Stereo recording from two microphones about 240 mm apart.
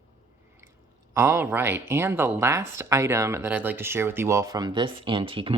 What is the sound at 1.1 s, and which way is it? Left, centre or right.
Speech, centre.